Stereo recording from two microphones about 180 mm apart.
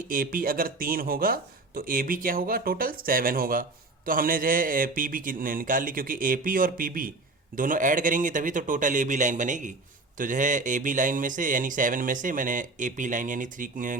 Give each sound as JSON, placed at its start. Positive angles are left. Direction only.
{"t": 0.1, "sound": "speech", "side_deg": -50}